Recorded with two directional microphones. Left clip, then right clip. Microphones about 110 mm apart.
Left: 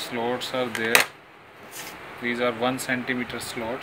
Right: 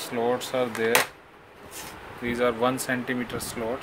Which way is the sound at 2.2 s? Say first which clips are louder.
Right 1 dB; 50° right (ahead or behind).